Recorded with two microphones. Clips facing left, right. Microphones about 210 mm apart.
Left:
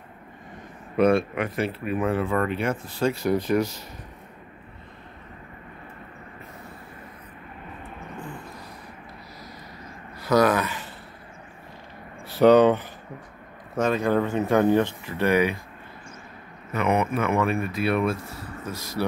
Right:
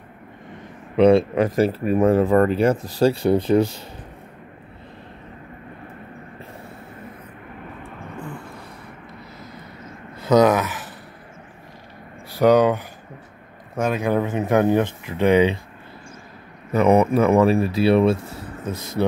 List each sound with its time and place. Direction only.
0.9 s speech: 25° right (ahead or behind)
10.2 s speech: 20° right (ahead or behind)
12.3 s speech: 10° right (ahead or behind)
16.7 s speech: 35° right (ahead or behind)